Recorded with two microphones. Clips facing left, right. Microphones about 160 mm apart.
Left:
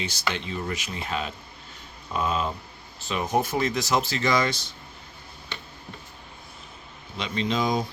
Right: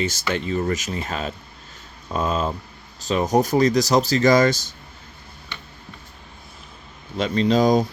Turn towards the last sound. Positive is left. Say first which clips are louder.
# right 8 dB
turn(degrees=-40)  # may be behind; listen again after turning